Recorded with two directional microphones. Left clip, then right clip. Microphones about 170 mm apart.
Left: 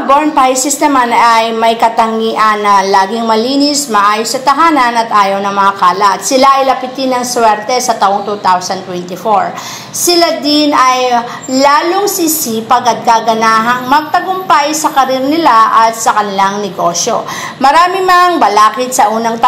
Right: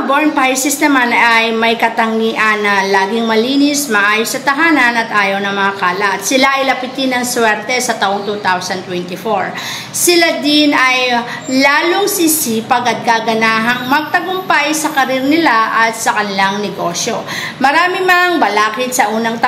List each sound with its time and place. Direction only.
0.4 s a woman's voice: 20° left (ahead or behind)
10.0 s child singing: 15° left (ahead or behind)
17.6 s a woman's voice: 25° left (ahead or behind)